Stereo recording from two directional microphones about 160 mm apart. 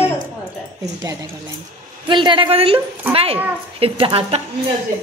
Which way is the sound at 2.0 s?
30° right (ahead or behind).